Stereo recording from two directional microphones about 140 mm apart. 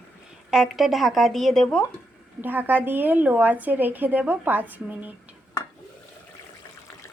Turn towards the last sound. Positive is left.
turn(degrees=-10)  # may be behind; listen again after turning